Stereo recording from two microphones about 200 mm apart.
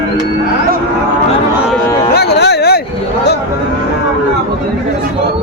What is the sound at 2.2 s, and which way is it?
Speech, 55° left (ahead or behind).